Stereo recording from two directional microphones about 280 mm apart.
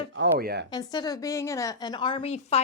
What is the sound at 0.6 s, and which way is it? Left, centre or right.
A woman's voice, centre.